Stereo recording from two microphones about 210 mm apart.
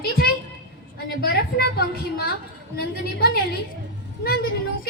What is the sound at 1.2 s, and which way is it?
A woman's voice, 50° left (ahead or behind).